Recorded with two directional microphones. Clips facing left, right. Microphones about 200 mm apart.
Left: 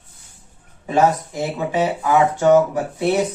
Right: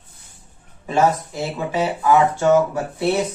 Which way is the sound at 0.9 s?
20° left (ahead or behind).